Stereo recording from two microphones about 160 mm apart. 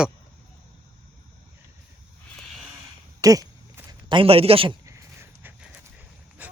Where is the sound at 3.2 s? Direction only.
20° right (ahead or behind).